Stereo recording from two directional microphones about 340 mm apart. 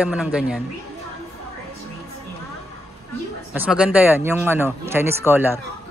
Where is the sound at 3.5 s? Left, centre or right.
Centre.